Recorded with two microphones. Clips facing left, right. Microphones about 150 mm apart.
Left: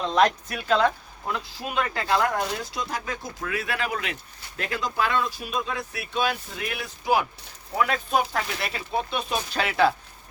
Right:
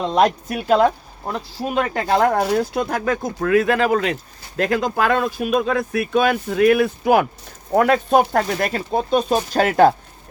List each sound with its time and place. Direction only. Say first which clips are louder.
0.5 s speech: right 6 dB; 45° right (ahead or behind)